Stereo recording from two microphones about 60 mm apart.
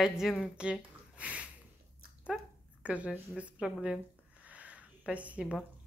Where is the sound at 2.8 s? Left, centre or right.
Right.